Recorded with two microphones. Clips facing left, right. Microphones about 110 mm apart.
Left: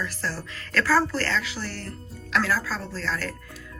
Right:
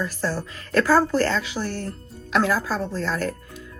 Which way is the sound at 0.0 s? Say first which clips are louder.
Right 5 dB; 20° right (ahead or behind).